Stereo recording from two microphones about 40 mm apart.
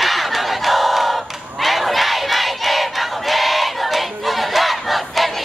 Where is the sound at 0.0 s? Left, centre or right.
Centre.